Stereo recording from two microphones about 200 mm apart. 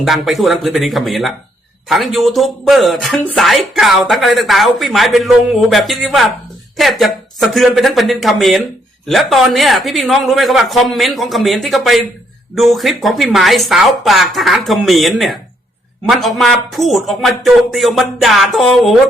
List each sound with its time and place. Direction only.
0.0 s speech: centre (ahead or behind)